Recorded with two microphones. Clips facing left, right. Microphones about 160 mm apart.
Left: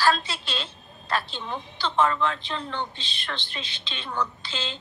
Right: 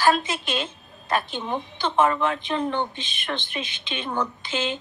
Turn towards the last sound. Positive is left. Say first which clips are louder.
# right 7 dB
turn(degrees=-20)  # may be behind; listen again after turning